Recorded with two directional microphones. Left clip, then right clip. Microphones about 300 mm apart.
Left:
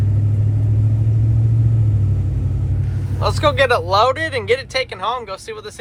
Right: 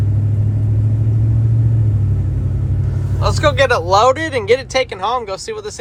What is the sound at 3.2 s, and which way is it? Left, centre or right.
Speech, centre.